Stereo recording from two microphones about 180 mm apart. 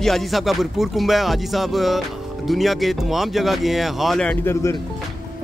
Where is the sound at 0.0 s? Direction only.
Centre (ahead or behind).